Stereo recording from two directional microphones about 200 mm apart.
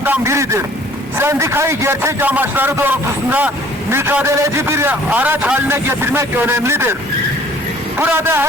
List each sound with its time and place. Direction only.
0.0 s a man's voice: 10° right (ahead or behind)
7.9 s a man's voice: 10° right (ahead or behind)